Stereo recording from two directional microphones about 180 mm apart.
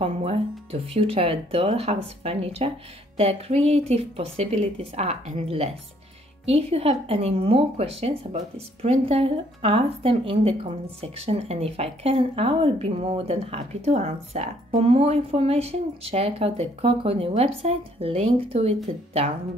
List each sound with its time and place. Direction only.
0.0 s speech: 35° right (ahead or behind)